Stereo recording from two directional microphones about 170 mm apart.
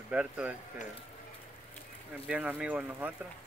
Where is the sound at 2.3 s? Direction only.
5° right (ahead or behind).